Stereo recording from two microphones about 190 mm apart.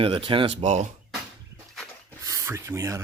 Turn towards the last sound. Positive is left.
turn(degrees=-15)  # may be behind; listen again after turning